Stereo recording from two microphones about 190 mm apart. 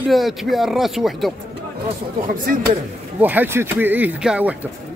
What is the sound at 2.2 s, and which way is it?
Speech, 45° right (ahead or behind).